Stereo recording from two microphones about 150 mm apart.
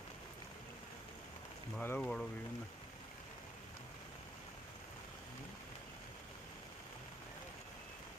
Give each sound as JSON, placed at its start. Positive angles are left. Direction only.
{"t": 1.7, "sound": "speech", "side_deg": 10}